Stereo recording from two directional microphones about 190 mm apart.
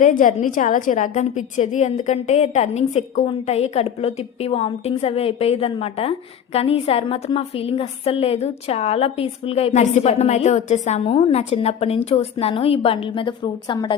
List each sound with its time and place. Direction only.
0.0 s a woman's voice: 45° left (ahead or behind); by 13.9 s 25° left (ahead or behind)